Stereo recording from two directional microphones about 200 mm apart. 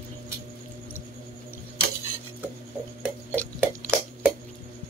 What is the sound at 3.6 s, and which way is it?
Drip, 10° right (ahead or behind).